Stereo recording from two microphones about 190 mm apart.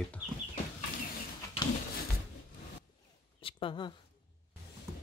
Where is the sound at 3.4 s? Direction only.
30° left (ahead or behind).